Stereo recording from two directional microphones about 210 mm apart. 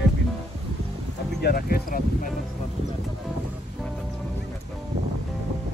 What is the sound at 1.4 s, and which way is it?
Speech, 45° left (ahead or behind).